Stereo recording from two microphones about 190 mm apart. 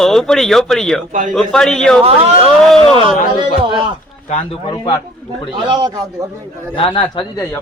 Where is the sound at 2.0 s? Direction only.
30° right (ahead or behind).